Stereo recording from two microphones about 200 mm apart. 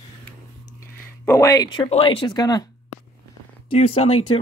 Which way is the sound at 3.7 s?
30° left (ahead or behind).